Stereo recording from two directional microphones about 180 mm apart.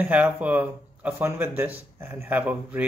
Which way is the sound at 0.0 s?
5° right (ahead or behind).